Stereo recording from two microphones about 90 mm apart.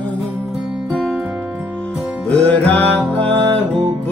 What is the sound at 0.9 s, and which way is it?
Music, 10° right (ahead or behind).